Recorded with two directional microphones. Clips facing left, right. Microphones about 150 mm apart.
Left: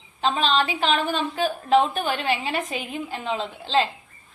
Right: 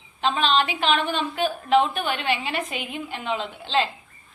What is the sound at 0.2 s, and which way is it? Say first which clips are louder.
A woman's voice: even; 35° left (ahead or behind).